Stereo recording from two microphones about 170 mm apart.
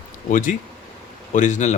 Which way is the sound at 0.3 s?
50° left (ahead or behind).